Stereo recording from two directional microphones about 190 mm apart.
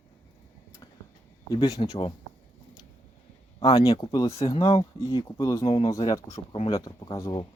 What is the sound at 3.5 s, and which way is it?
Speech, 20° left (ahead or behind).